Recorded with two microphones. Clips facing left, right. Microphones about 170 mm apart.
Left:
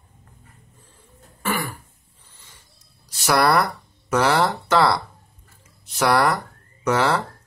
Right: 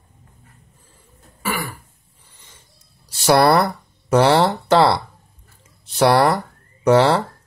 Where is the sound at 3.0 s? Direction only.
30° right (ahead or behind).